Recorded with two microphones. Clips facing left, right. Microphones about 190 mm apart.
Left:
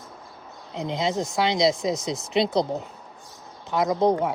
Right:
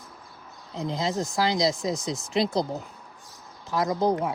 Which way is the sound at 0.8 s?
25° left (ahead or behind).